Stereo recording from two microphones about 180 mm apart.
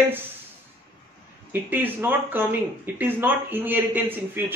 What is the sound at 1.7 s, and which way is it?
A man's voice, 10° right (ahead or behind).